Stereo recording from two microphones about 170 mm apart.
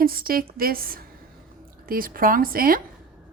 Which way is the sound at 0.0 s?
60° right (ahead or behind).